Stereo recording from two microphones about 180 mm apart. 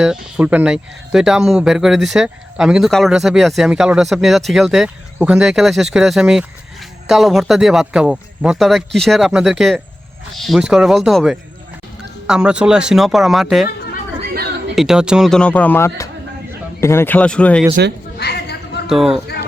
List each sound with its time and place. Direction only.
0.0 s speech: 5° right (ahead or behind)
14.8 s speech: 5° right (ahead or behind)
18.2 s a sound: 65° left (ahead or behind)
18.9 s speech: 5° right (ahead or behind)